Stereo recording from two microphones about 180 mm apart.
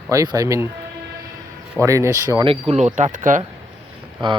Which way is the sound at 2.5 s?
35° right (ahead or behind).